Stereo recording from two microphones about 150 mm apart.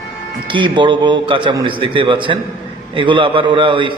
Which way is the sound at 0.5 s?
30° right (ahead or behind).